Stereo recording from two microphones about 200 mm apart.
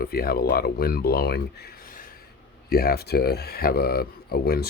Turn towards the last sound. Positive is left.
turn(degrees=50)  # may be behind; listen again after turning